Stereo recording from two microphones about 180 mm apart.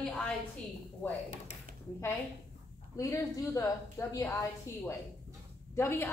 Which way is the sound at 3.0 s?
15° left (ahead or behind).